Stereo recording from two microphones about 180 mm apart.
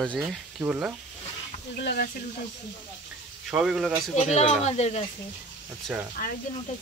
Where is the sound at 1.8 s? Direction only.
65° left (ahead or behind).